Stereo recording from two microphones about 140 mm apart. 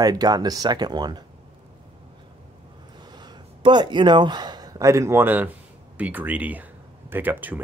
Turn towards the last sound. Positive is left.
turn(degrees=-15)  # may be behind; listen again after turning